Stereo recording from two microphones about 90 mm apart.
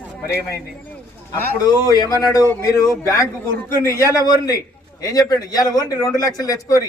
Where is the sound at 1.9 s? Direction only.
45° left (ahead or behind).